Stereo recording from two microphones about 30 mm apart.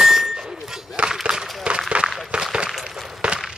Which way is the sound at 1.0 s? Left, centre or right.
Right.